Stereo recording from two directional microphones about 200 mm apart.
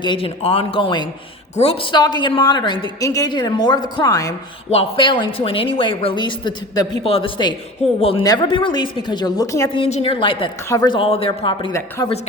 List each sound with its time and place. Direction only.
0.0 s a woman's voice: 25° left (ahead or behind)
9.8 s a woman's voice: 30° left (ahead or behind)